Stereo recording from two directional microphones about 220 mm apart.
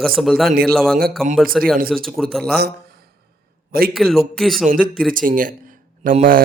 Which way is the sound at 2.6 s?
45° right (ahead or behind).